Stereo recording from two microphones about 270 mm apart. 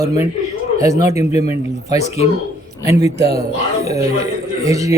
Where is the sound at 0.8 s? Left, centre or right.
Centre.